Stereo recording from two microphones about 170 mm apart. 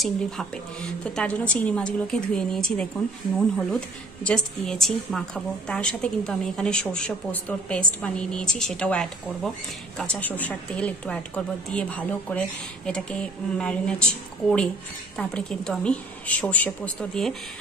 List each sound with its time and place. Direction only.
0.0 s a woman's voice: 5° left (ahead or behind)